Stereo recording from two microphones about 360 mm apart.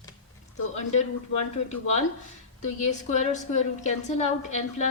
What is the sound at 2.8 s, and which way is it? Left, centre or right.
A woman's voice, centre.